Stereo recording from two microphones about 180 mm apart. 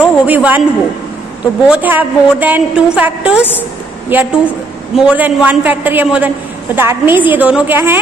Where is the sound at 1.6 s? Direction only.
10° right (ahead or behind).